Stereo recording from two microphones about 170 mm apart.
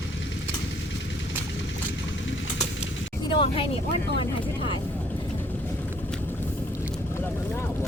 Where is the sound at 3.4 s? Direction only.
30° left (ahead or behind).